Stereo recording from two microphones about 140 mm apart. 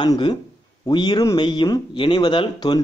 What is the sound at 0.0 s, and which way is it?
Speech, 35° left (ahead or behind).